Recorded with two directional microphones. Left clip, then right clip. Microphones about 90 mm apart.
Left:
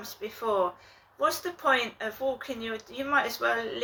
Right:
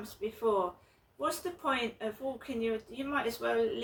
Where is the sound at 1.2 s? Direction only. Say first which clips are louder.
Left 7 dB; 20° right (ahead or behind).